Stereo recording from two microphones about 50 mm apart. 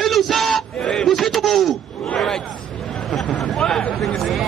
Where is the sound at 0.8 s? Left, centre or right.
Left.